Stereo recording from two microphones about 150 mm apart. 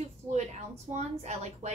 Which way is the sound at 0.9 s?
50° right (ahead or behind).